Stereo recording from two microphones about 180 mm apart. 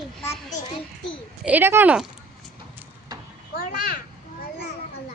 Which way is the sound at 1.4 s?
10° right (ahead or behind).